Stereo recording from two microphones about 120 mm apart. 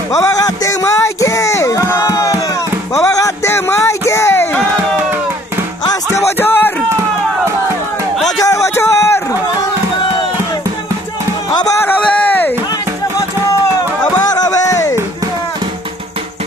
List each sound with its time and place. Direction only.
0.1 s music: 25° left (ahead or behind)
2.9 s a sound: 25° left (ahead or behind)
6.1 s music: 20° left (ahead or behind)
8.4 s music: 25° left (ahead or behind)
11.8 s a sound: 15° left (ahead or behind)
14.2 s music: 35° left (ahead or behind)